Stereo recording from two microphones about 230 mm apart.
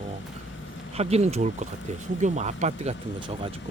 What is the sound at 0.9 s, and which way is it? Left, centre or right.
Speech, right.